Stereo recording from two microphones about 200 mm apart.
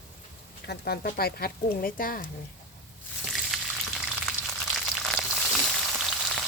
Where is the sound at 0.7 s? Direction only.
50° left (ahead or behind).